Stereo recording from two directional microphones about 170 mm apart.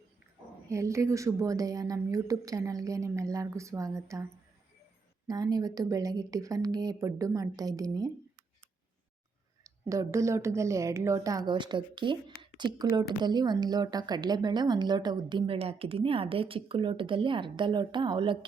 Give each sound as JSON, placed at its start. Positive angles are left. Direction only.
{"t": 0.7, "sound": "a woman's voice", "side_deg": -15}
{"t": 5.3, "sound": "a woman's voice", "side_deg": -20}
{"t": 9.9, "sound": "a woman's voice", "side_deg": -20}